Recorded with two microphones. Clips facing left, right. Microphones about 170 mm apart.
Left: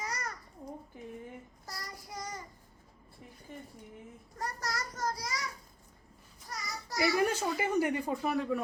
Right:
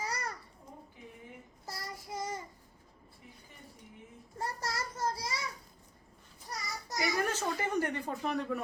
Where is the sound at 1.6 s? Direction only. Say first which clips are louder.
Right 4 dB; 25° right (ahead or behind).